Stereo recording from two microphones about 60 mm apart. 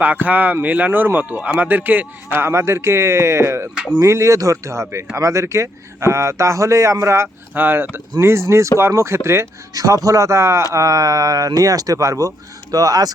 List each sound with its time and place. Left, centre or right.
0.0 s speech: right
2.4 s a man's voice: right
7.5 s speech: right
8.2 s speech: right
9.7 s a man's voice: right
10.8 s speech: right
12.7 s speech: right